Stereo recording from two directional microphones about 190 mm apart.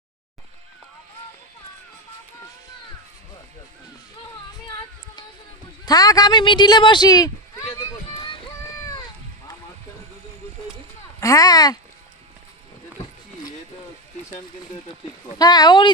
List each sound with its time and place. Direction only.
5.8 s speech: 20° left (ahead or behind)
7.8 s run: 25° left (ahead or behind)
11.2 s speech: 20° left (ahead or behind)
15.4 s speech: 20° left (ahead or behind)